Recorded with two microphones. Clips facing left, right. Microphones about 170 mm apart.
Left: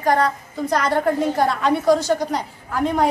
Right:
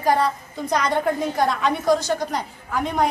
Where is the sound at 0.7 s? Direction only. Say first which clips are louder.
Left 2 dB; 5° left (ahead or behind).